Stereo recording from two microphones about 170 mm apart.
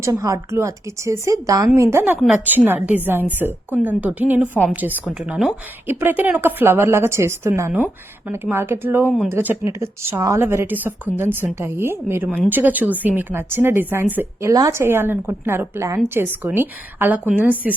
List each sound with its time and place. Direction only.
0.0 s speech: 20° right (ahead or behind)